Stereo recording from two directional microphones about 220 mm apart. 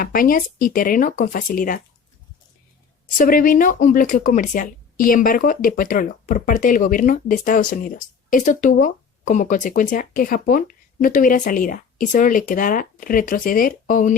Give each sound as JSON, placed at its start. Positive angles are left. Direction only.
{"t": 0.0, "sound": "speech", "side_deg": 40}
{"t": 3.2, "sound": "speech", "side_deg": 40}